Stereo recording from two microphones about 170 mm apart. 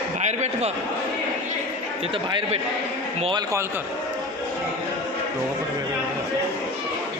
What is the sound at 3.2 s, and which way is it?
Speech, 25° right (ahead or behind).